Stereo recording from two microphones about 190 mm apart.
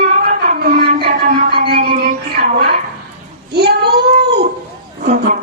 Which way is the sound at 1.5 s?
55° right (ahead or behind).